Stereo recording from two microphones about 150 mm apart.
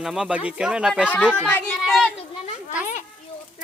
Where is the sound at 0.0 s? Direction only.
5° right (ahead or behind).